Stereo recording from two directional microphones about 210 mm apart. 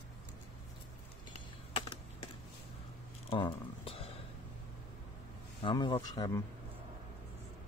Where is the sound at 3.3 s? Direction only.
25° left (ahead or behind).